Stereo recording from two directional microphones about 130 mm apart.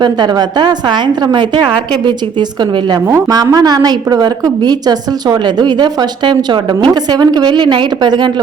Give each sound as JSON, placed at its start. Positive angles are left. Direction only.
{"t": 0.0, "sound": "a woman's voice", "side_deg": -35}